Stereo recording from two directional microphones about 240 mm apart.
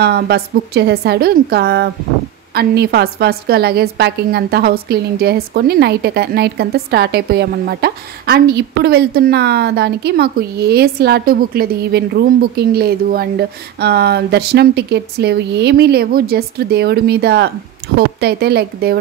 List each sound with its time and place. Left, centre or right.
0.0 s a woman's voice: right